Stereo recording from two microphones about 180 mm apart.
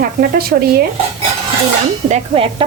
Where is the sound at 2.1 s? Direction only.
30° right (ahead or behind).